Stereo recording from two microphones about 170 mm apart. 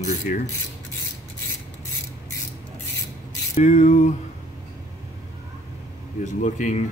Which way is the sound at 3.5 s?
45° left (ahead or behind).